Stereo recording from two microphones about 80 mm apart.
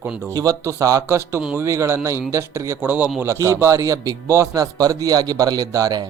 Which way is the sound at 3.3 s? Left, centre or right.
Right.